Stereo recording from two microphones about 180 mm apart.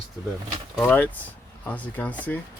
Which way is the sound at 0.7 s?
10° left (ahead or behind).